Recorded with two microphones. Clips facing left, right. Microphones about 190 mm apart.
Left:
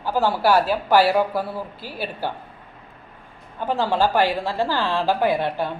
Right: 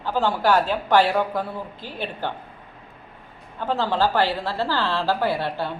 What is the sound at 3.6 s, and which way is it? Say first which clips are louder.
A woman's voice: left 1 dB; 15° left (ahead or behind).